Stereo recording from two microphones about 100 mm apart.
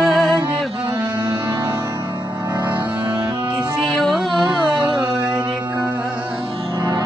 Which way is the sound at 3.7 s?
Centre (ahead or behind).